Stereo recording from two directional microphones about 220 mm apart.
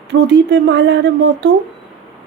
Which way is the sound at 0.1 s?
55° right (ahead or behind).